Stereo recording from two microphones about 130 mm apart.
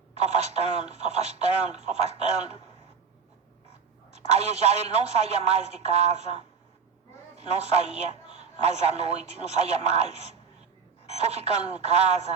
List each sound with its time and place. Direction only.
0.2 s a man's voice: 55° right (ahead or behind)
4.1 s a man's voice: 60° right (ahead or behind)
7.3 s a man's voice: 55° right (ahead or behind)